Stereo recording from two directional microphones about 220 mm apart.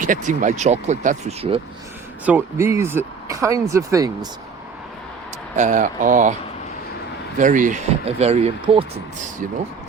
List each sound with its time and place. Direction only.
0.0 s speech: 35° right (ahead or behind)
2.2 s speech: 10° right (ahead or behind)
5.5 s speech: 35° right (ahead or behind)
7.3 s speech: 35° right (ahead or behind)